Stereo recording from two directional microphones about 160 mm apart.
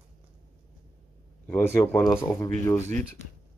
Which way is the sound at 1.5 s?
15° left (ahead or behind).